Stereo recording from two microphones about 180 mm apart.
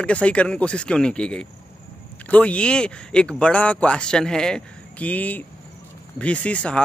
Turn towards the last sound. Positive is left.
turn(degrees=5)  # may be behind; listen again after turning